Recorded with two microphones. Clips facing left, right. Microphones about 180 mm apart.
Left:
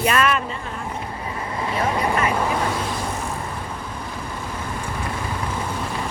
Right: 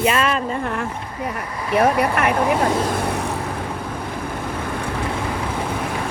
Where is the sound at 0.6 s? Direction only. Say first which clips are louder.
Right 5 dB; 70° right (ahead or behind).